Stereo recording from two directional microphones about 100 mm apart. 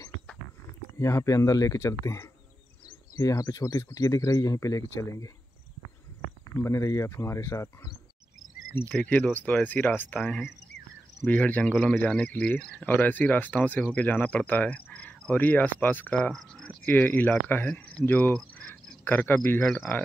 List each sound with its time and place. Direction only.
0.9 s speech: 30° left (ahead or behind)
6.6 s speech: 30° left (ahead or behind)
8.8 s speech: 10° left (ahead or behind)
13.9 s cricket: 15° left (ahead or behind)
16.8 s speech: 20° left (ahead or behind)
19.6 s cricket: 5° left (ahead or behind)